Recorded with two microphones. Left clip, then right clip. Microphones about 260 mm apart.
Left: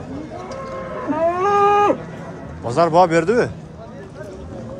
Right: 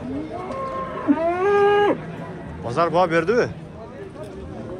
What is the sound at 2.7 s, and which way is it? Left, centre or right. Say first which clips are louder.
Speech: left 5 dB; left.